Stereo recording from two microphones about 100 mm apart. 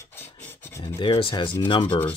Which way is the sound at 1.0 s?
60° left (ahead or behind).